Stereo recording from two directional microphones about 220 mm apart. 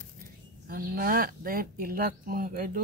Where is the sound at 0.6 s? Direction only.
40° right (ahead or behind).